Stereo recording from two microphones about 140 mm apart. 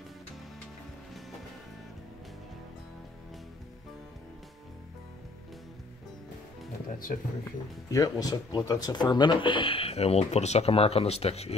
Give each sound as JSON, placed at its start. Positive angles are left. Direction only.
{"t": 6.9, "sound": "music", "side_deg": 75}
{"t": 7.9, "sound": "speech", "side_deg": 25}